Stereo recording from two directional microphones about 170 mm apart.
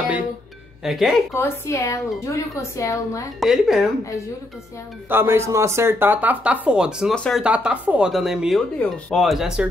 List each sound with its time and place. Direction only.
0.8 s speech: centre (ahead or behind)
1.3 s speech: 15° left (ahead or behind)
3.3 s speech: centre (ahead or behind)
5.1 s speech: 15° right (ahead or behind)